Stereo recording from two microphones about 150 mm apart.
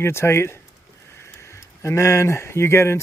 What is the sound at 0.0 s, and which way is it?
Speech, 15° left (ahead or behind).